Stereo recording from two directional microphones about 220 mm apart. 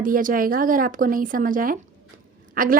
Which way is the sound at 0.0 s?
40° right (ahead or behind).